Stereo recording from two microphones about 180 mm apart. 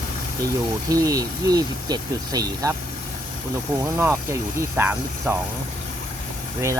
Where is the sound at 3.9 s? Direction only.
10° right (ahead or behind).